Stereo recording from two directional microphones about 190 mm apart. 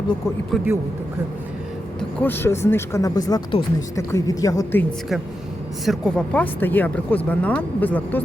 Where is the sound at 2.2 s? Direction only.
10° left (ahead or behind).